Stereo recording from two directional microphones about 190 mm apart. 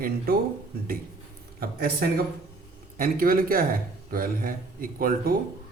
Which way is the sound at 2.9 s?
50° right (ahead or behind).